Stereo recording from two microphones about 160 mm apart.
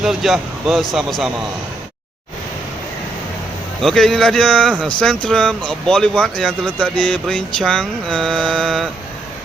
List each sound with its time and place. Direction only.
0.0 s speech: centre (ahead or behind)
3.8 s speech: centre (ahead or behind)